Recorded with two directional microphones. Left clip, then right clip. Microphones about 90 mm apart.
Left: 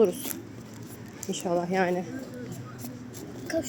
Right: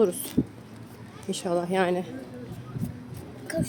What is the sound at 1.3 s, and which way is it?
Speech, 40° right (ahead or behind).